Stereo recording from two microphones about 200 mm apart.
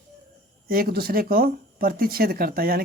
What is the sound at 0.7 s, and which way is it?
Speech, 50° right (ahead or behind).